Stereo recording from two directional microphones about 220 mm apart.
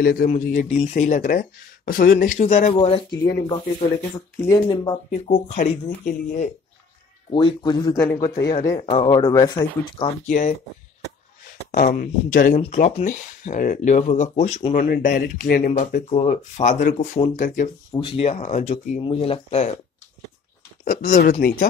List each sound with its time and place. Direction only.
0.0 s speech: 40° left (ahead or behind); by 4.9 s 15° left (ahead or behind)
5.1 s speech: 30° left (ahead or behind)
7.2 s speech: 20° left (ahead or behind)
8.4 s speech: 45° left (ahead or behind)
8.7 s speech: 25° left (ahead or behind)
10.2 s speech: 35° left (ahead or behind)
11.7 s speech: 35° left (ahead or behind)
15.7 s speech: 30° left (ahead or behind)
17.9 s speech: 25° left (ahead or behind)
20.8 s speech: 40° left (ahead or behind)